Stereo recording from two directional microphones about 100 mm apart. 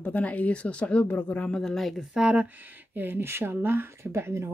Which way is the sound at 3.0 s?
20° right (ahead or behind).